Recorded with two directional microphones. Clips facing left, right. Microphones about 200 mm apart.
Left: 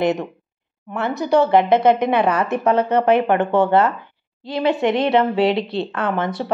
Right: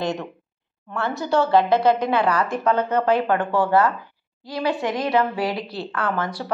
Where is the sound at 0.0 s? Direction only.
20° left (ahead or behind).